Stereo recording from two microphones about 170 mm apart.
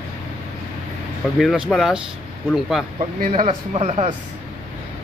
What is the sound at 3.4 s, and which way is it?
Speech, 35° right (ahead or behind).